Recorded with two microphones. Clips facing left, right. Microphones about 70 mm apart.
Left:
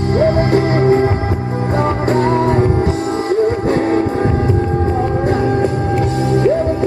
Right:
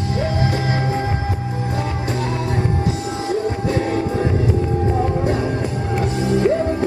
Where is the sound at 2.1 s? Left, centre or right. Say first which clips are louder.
Left 11 dB; left.